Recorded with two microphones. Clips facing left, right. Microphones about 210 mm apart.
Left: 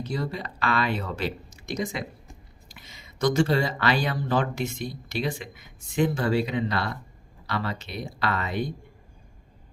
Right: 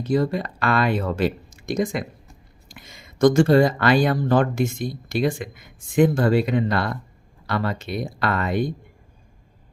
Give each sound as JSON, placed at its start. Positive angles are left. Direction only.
{"t": 0.0, "sound": "speech", "side_deg": -50}